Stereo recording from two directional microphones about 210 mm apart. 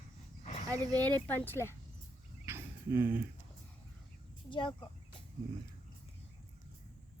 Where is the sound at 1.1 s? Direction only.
10° left (ahead or behind).